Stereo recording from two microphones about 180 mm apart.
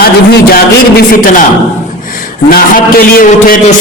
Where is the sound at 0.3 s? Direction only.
60° left (ahead or behind).